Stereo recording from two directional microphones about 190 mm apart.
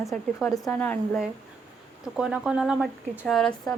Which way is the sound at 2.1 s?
5° right (ahead or behind).